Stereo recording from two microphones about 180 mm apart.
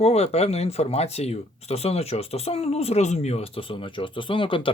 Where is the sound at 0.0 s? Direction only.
35° left (ahead or behind).